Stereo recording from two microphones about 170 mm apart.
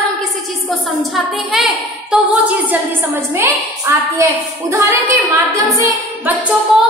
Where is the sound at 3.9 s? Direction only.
20° right (ahead or behind).